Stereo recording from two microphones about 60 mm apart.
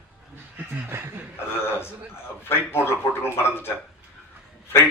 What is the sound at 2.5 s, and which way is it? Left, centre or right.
Speech, left.